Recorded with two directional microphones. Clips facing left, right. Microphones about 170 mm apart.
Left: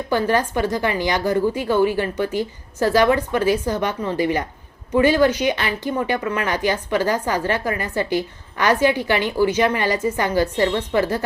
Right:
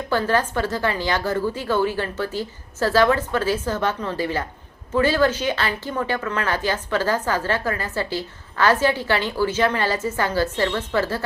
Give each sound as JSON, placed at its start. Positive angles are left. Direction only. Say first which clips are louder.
{"t": 0.1, "sound": "a woman's voice", "louder": "left 2 dB", "side_deg": 15}